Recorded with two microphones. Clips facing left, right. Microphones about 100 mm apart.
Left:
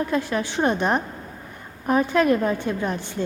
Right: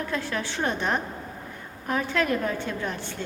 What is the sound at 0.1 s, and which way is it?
A woman's voice, 15° left (ahead or behind).